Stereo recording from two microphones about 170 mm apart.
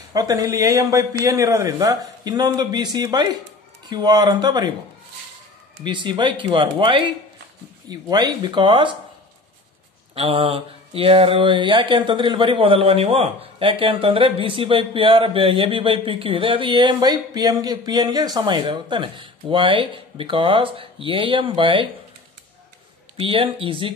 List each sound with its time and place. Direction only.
0.1 s a man's voice: 20° right (ahead or behind)
5.9 s a man's voice: 25° right (ahead or behind)
10.1 s speech: 35° right (ahead or behind)
23.1 s speech: 30° right (ahead or behind)